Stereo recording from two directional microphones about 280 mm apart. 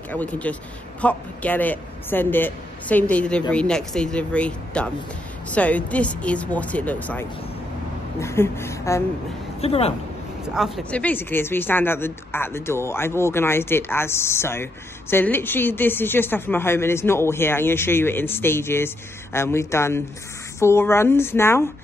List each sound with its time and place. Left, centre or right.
0.1 s a woman's voice: centre
9.6 s speech: left
10.4 s a woman's voice: centre